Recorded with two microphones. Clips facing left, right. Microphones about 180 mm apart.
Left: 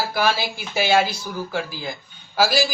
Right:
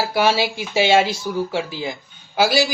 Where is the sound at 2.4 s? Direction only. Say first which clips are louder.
Right 2 dB; 20° right (ahead or behind).